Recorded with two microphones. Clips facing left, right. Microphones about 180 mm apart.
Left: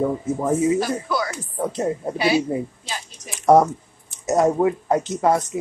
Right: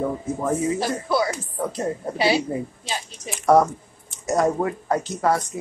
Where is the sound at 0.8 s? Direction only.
25° right (ahead or behind).